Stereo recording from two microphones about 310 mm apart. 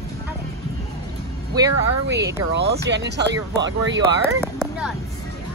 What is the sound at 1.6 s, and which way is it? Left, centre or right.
Speech, centre.